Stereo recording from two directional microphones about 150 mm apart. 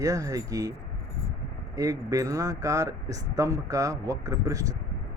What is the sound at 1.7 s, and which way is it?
Speech, 20° right (ahead or behind).